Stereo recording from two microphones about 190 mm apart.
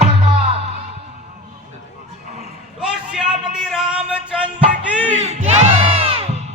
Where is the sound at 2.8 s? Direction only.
5° right (ahead or behind).